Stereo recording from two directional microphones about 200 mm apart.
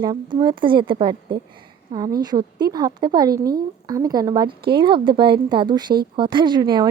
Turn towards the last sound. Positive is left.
turn(degrees=-20)  # may be behind; listen again after turning